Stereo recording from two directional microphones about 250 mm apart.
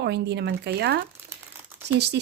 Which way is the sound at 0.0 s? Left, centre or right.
Right.